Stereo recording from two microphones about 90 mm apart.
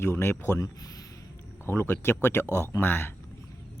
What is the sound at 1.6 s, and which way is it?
Speech, 25° left (ahead or behind).